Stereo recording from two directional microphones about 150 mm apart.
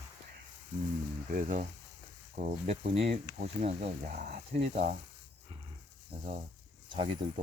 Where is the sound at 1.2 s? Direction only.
60° right (ahead or behind).